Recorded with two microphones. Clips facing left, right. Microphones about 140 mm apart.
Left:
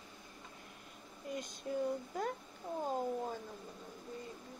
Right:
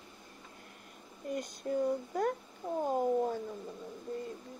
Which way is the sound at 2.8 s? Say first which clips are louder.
Right 7 dB; 55° right (ahead or behind).